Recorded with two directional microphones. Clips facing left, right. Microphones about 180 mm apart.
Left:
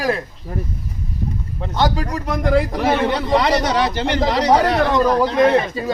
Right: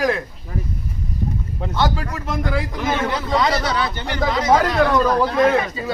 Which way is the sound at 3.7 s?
75° left (ahead or behind).